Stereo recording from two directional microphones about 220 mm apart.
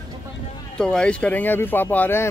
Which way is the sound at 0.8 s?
5° left (ahead or behind).